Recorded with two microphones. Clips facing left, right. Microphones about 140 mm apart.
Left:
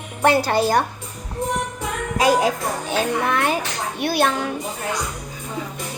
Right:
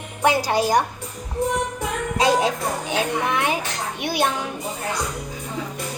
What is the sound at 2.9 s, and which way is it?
A child's voice, 15° right (ahead or behind).